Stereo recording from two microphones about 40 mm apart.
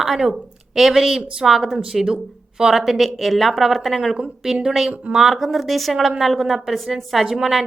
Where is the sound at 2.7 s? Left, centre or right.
Centre.